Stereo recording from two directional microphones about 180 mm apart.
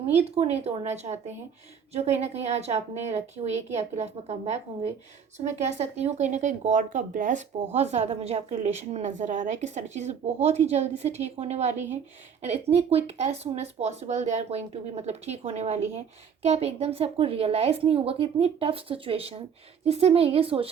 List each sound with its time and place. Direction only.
0.1 s speech: 35° right (ahead or behind)